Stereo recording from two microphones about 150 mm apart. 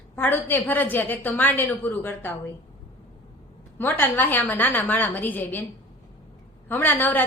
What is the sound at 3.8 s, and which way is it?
A woman's voice, 15° left (ahead or behind).